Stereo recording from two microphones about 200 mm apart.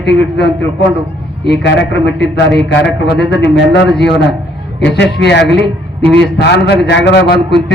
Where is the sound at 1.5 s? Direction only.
60° left (ahead or behind).